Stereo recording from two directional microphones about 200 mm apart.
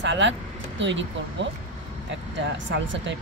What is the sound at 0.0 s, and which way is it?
Speech, 65° right (ahead or behind).